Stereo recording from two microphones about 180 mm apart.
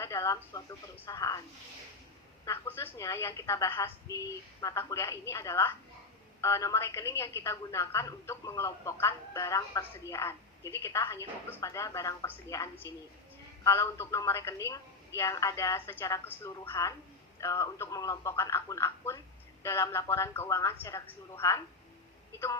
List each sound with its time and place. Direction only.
0.0 s a woman's voice: 15° left (ahead or behind)
2.4 s a woman's voice: 15° left (ahead or behind)